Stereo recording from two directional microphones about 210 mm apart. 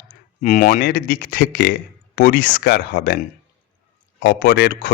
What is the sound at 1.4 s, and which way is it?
A man's voice, 50° left (ahead or behind).